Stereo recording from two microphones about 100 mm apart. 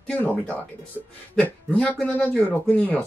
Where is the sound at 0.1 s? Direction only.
15° left (ahead or behind).